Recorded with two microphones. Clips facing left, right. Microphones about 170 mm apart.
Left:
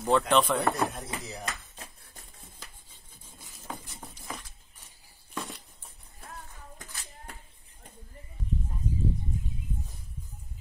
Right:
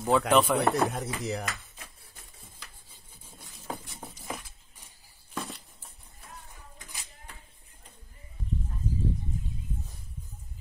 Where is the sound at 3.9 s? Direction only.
5° right (ahead or behind).